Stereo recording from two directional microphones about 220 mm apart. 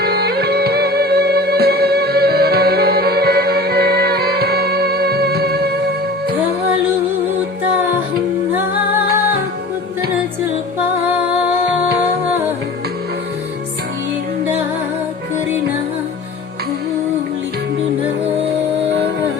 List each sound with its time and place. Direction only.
0.0 s music: 45° right (ahead or behind)
11.1 s music: 5° right (ahead or behind)